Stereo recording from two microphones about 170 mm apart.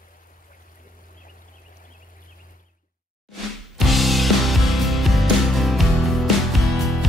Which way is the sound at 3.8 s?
Centre (ahead or behind).